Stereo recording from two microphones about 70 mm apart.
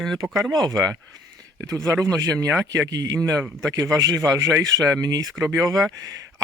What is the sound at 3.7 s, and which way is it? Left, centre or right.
Speech, right.